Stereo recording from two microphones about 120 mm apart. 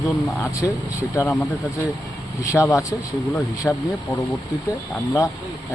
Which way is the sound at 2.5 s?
25° left (ahead or behind).